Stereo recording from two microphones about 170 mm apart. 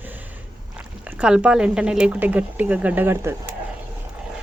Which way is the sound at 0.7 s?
10° right (ahead or behind).